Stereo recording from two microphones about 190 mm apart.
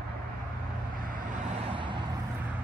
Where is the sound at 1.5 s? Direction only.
25° right (ahead or behind).